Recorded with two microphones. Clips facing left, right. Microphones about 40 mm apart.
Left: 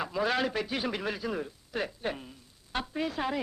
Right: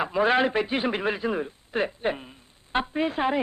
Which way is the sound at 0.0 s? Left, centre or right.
Right.